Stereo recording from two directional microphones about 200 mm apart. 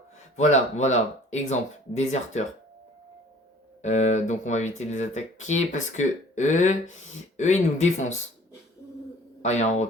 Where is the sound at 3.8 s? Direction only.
35° left (ahead or behind).